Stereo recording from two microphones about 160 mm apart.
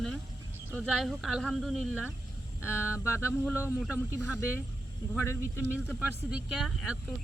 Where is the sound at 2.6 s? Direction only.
15° left (ahead or behind).